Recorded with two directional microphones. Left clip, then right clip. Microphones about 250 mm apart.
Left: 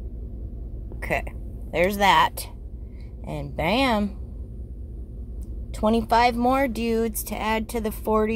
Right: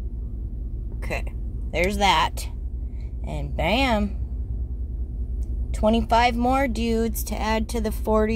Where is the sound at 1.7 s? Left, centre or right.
Centre.